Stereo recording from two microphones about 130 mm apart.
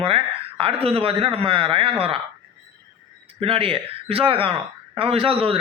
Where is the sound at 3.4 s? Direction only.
45° right (ahead or behind).